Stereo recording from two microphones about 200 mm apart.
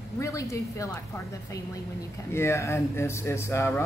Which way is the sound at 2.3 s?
15° left (ahead or behind).